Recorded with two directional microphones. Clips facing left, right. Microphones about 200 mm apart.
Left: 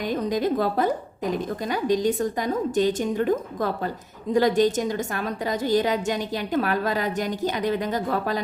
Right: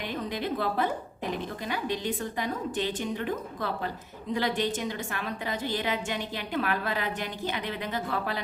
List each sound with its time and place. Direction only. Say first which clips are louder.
0.0 s a woman's voice: left 8 dB; 40° left (ahead or behind)